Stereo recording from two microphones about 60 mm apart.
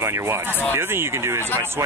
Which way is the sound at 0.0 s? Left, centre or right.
Right.